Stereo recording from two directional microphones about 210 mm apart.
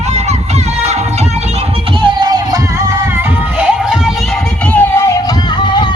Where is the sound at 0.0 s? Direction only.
30° right (ahead or behind).